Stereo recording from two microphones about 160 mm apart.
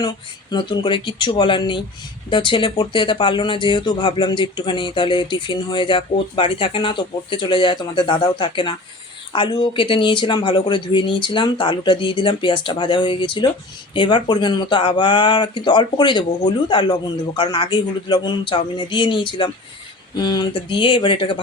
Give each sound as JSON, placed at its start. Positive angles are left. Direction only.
{"t": 0.5, "sound": "speech", "side_deg": 30}